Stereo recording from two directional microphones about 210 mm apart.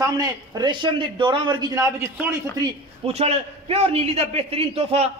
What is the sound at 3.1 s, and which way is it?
A man's voice, 30° right (ahead or behind).